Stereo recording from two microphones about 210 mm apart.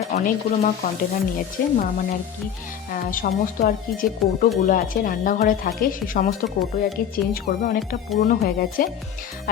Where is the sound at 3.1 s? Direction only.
40° left (ahead or behind).